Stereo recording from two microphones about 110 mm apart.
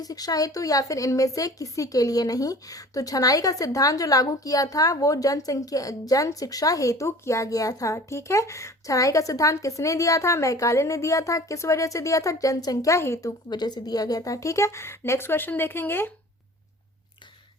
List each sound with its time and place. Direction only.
0.0 s speech: 35° left (ahead or behind)
13.5 s a woman's voice: 40° left (ahead or behind); by 16.1 s 20° left (ahead or behind)